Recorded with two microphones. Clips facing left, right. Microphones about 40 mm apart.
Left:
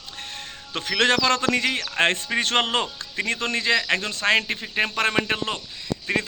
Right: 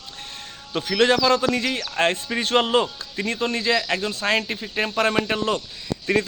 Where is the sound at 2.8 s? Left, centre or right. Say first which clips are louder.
Right 2 dB; left.